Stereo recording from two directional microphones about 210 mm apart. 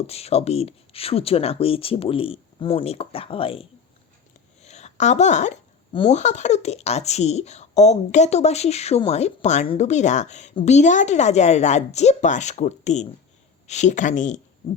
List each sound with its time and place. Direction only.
0.1 s speech: 30° left (ahead or behind)